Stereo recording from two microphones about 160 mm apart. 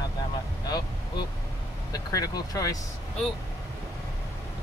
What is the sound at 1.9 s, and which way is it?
Speech, 25° left (ahead or behind).